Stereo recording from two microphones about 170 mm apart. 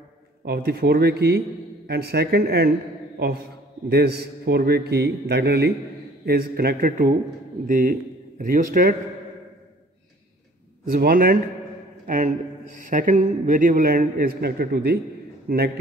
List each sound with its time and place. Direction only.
0.5 s a man's voice: 70° right (ahead or behind)
3.9 s a man's voice: 75° right (ahead or behind)
10.9 s a man's voice: 60° right (ahead or behind)
12.1 s a man's voice: 45° right (ahead or behind); by 15.7 s 65° right (ahead or behind)